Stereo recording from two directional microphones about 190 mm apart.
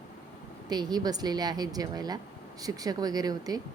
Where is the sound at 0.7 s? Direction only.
20° right (ahead or behind).